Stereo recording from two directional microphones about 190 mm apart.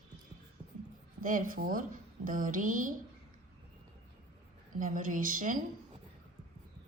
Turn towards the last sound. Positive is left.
turn(degrees=-45)  # may be behind; listen again after turning